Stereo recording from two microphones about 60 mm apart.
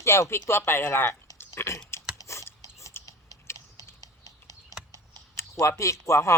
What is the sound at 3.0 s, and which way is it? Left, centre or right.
Typing, left.